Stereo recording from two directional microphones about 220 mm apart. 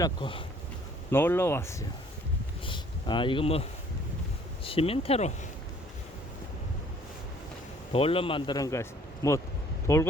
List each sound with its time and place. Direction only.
0.0 s a man's voice: 20° left (ahead or behind)
1.1 s speech: 10° left (ahead or behind)
2.6 s a man's voice: 20° left (ahead or behind)
7.9 s a man's voice: 25° left (ahead or behind)